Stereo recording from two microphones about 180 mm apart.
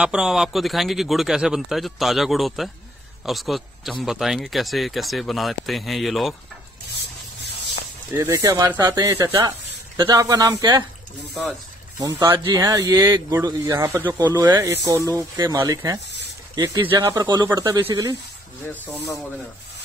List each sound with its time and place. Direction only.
0.0 s a man's voice: 5° right (ahead or behind)
8.1 s speech: 15° right (ahead or behind)
12.0 s speech: 20° right (ahead or behind)